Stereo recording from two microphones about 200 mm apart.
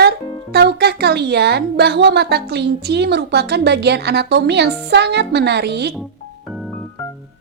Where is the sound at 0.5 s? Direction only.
55° right (ahead or behind).